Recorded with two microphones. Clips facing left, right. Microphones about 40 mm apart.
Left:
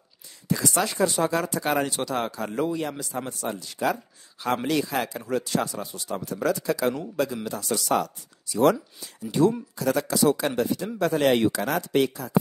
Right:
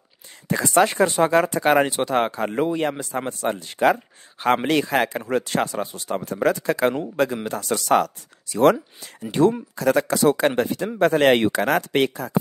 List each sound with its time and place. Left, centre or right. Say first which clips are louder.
0.5 s speech: right 7 dB; right